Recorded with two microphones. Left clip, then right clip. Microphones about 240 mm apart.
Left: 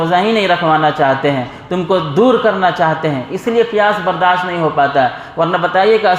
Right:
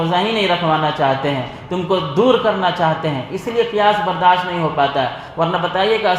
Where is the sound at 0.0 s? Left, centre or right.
Left.